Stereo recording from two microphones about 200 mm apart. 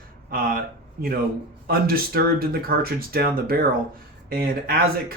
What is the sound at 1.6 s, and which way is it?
Speech, 50° right (ahead or behind).